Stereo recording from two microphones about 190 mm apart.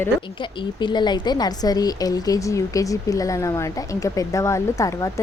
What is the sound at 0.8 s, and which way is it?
A woman's voice, 25° left (ahead or behind).